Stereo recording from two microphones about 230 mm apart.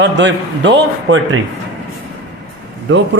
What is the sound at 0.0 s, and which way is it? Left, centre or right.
A woman's voice, right.